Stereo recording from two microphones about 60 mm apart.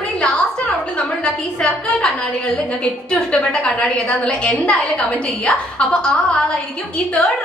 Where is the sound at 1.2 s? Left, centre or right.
Centre.